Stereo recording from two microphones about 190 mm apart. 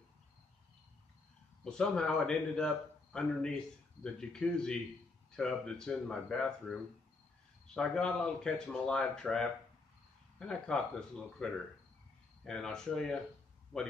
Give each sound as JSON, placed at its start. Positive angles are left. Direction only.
{"t": 1.6, "sound": "a man's voice", "side_deg": 5}